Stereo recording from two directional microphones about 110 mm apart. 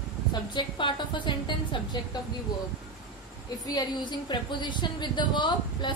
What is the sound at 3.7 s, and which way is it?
A woman's voice, 45° left (ahead or behind).